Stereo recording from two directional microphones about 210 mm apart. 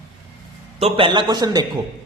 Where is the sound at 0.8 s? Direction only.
25° right (ahead or behind).